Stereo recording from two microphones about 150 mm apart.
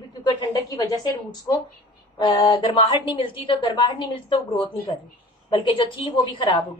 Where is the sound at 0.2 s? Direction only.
25° left (ahead or behind).